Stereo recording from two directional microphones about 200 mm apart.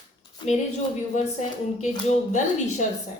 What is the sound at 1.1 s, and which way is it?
A woman's voice, 35° left (ahead or behind).